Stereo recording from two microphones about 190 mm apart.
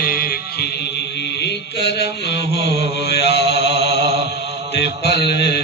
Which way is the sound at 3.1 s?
60° left (ahead or behind).